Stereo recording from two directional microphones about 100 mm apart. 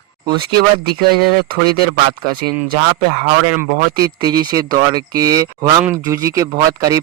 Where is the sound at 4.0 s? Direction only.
45° right (ahead or behind).